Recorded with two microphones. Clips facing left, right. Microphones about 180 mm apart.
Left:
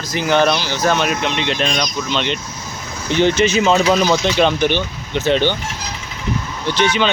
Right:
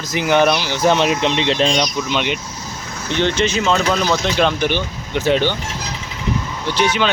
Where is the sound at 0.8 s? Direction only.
25° right (ahead or behind).